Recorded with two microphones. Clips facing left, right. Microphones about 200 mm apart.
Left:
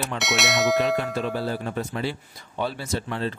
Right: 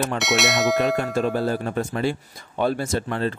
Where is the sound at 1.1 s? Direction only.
45° right (ahead or behind).